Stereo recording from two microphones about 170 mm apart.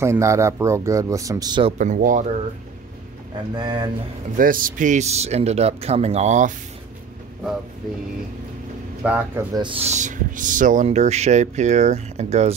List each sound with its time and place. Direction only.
0.0 s speech: 15° right (ahead or behind)
1.8 s speech: 50° right (ahead or behind)
3.5 s speech: 25° right (ahead or behind)
4.4 s speech: 55° right (ahead or behind)
9.0 s speech: 10° right (ahead or behind)
9.5 s speech: 30° right (ahead or behind)